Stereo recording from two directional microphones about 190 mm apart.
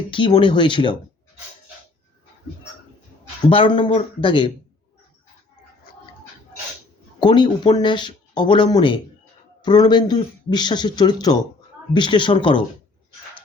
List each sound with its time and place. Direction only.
0.1 s speech: 25° left (ahead or behind)
3.5 s speech: 25° left (ahead or behind)
7.2 s speech: 25° left (ahead or behind)